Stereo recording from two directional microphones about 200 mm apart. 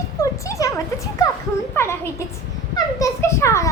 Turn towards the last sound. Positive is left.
turn(degrees=15)  # may be behind; listen again after turning